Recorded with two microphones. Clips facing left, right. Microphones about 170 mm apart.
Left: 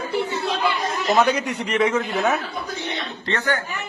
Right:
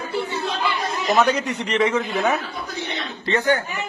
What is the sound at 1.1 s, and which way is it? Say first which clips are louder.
Speech: even; 10° left (ahead or behind).